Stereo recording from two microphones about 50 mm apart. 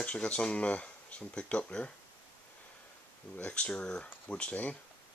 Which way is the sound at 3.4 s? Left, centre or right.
Left.